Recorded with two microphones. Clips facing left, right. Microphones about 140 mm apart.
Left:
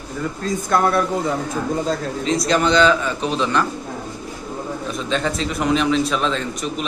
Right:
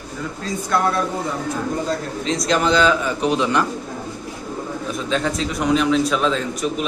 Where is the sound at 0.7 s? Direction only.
45° left (ahead or behind).